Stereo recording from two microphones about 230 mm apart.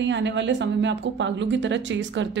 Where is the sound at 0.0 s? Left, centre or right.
Right.